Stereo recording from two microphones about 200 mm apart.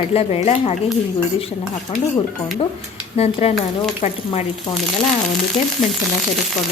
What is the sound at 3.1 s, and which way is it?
A woman's voice, 30° left (ahead or behind).